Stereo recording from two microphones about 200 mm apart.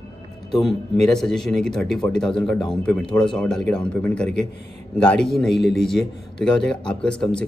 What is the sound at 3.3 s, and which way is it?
Speech, 5° left (ahead or behind).